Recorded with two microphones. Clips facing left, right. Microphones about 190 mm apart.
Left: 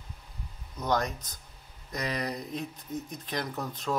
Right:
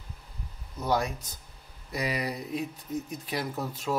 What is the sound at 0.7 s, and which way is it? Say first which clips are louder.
Speech: right 1 dB; 10° right (ahead or behind).